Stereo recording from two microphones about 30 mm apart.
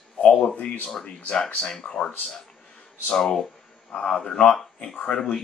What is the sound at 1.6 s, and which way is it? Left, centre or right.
Speech, left.